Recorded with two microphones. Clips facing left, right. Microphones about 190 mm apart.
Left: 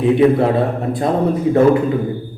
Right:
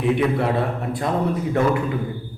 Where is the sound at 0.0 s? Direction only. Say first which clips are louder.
Left 7 dB; 30° left (ahead or behind).